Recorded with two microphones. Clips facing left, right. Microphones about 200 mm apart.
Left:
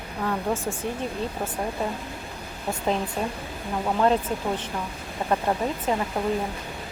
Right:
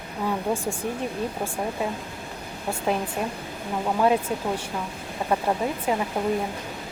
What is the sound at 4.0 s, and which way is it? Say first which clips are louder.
Speech: even; 10° right (ahead or behind).